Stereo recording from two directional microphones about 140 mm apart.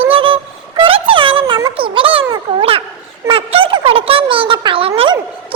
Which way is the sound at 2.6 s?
40° right (ahead or behind).